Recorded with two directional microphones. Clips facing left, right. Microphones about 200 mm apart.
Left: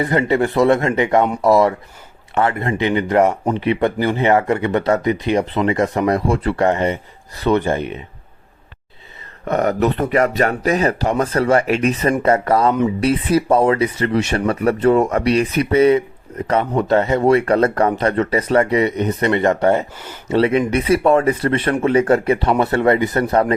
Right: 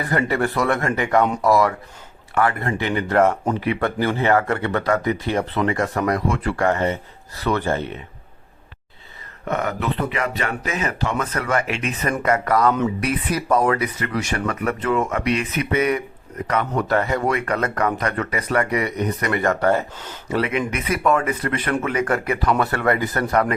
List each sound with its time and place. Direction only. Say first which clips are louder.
0.0 s speech: left 5 dB; 20° left (ahead or behind)
9.5 s speech: left 7 dB; 40° left (ahead or behind)